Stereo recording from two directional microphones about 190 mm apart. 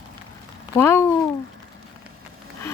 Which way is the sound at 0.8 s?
10° left (ahead or behind).